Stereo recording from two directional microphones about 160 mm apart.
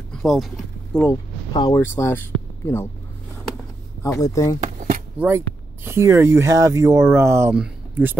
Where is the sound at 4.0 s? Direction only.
20° left (ahead or behind).